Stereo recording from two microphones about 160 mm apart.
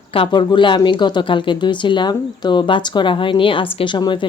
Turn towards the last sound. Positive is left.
turn(degrees=30)  # may be behind; listen again after turning